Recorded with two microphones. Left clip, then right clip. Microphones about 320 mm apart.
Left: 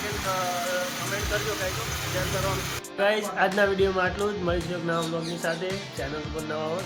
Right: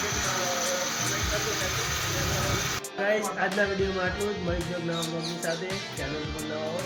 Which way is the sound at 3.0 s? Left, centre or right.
Centre.